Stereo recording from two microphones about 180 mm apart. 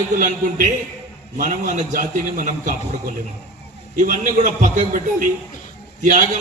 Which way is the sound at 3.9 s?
45° right (ahead or behind).